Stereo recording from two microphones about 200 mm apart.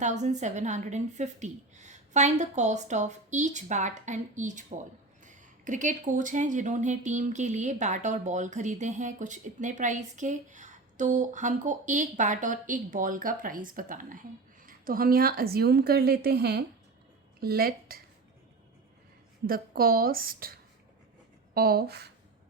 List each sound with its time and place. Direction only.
0.0 s a woman's voice: 35° right (ahead or behind)
19.5 s a woman's voice: 45° right (ahead or behind)